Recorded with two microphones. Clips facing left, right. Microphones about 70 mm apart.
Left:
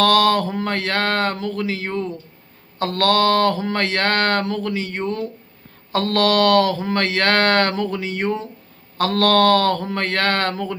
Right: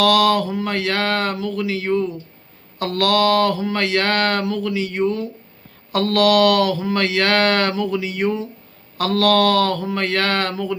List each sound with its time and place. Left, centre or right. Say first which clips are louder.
0.0 s speech: even; left